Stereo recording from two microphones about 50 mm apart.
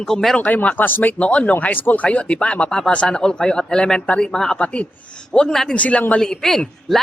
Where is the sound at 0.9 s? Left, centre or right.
Left.